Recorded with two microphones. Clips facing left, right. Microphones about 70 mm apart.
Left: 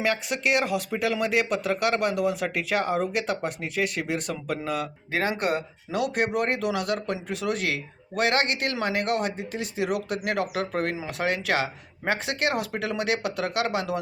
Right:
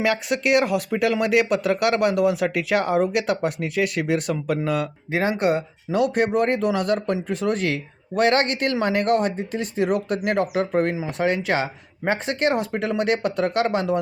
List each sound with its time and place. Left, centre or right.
0.0 s a man's voice: right
5.2 s speech: right